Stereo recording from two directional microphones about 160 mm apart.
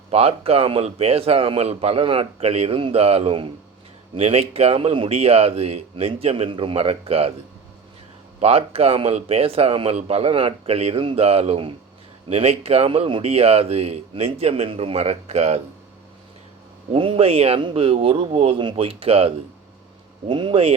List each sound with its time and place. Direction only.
0.1 s speech: 40° right (ahead or behind)
8.4 s speech: 40° right (ahead or behind)
16.9 s speech: 35° right (ahead or behind)